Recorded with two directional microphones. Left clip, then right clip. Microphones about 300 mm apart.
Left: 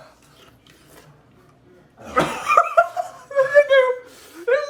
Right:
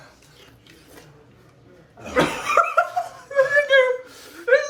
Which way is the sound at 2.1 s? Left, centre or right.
Centre.